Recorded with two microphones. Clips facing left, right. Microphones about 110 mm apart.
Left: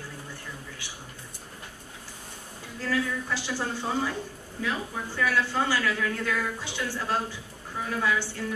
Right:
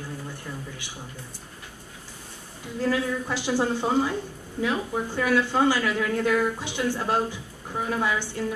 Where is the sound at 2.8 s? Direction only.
20° right (ahead or behind).